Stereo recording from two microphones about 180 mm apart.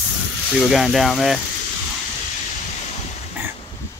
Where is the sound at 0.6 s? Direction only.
Centre (ahead or behind).